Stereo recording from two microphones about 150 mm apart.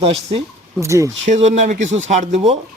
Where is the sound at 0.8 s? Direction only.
20° right (ahead or behind).